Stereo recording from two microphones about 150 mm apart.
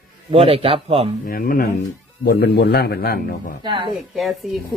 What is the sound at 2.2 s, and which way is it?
Speech, 90° left.